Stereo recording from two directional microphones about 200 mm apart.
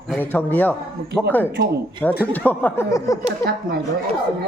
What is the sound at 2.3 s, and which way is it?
Speech, 10° left (ahead or behind).